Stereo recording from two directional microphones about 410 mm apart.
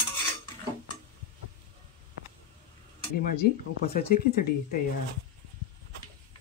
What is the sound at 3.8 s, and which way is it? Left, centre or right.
Speech, left.